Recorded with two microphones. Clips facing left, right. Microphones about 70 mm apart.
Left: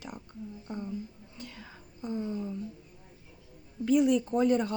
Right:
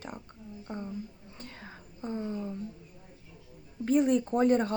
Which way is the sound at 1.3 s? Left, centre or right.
Right.